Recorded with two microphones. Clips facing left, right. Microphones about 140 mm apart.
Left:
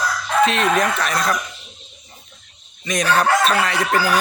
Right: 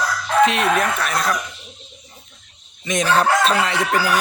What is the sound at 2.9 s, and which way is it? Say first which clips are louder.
Chicken: even; 25° right (ahead or behind).